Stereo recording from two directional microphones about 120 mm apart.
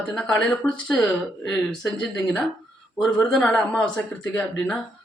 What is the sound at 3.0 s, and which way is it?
A woman's voice, 5° left (ahead or behind).